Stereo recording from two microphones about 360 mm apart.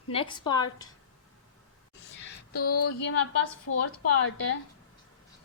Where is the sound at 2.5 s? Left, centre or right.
Left.